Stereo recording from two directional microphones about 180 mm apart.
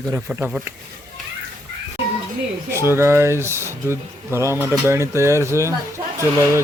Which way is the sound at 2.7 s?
15° right (ahead or behind).